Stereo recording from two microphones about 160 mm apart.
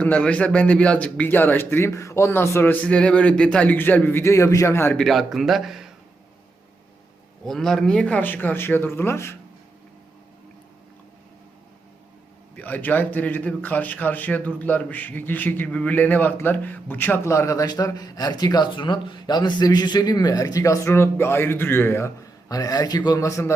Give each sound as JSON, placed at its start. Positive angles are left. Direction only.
{"t": 0.0, "sound": "speech", "side_deg": 10}
{"t": 7.4, "sound": "speech", "side_deg": 0}
{"t": 12.5, "sound": "speech", "side_deg": 10}